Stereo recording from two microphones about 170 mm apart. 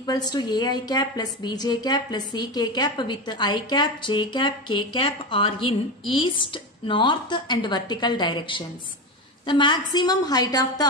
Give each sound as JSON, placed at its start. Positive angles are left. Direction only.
{"t": 0.0, "sound": "a woman's voice", "side_deg": 20}